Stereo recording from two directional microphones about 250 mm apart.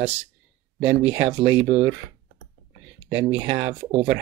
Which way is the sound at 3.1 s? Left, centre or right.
Centre.